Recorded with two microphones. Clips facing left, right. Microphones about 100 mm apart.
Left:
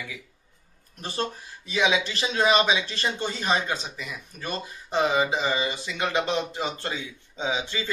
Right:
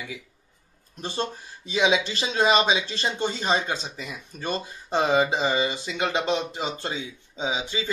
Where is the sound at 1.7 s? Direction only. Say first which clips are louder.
Right 2 dB; 25° right (ahead or behind).